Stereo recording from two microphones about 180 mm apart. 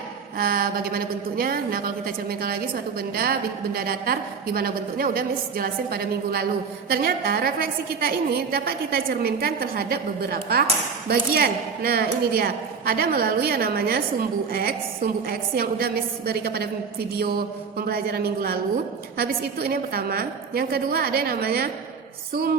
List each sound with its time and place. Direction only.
0.3 s a woman's voice: 55° right (ahead or behind)